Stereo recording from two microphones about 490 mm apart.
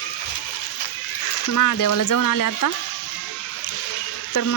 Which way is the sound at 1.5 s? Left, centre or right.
Left.